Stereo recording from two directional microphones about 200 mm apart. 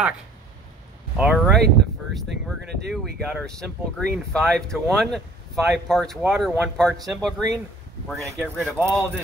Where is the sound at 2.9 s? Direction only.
5° right (ahead or behind).